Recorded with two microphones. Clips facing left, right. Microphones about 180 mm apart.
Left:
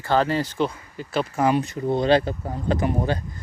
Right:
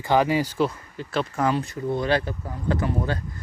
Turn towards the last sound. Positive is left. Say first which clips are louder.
# left 2 dB
turn(degrees=15)  # may be behind; listen again after turning